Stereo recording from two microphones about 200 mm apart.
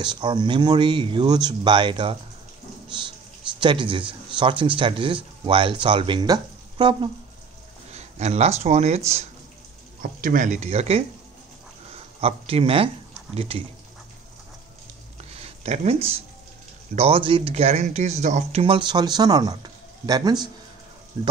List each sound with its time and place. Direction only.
0.0 s speech: 20° right (ahead or behind)
3.5 s speech: 25° right (ahead or behind)
10.0 s speech: 45° right (ahead or behind)
15.4 s speech: 35° right (ahead or behind)